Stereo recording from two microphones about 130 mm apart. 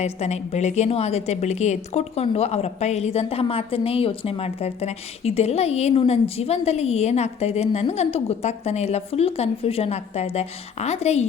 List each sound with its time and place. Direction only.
0.0 s a woman's voice: 55° left (ahead or behind)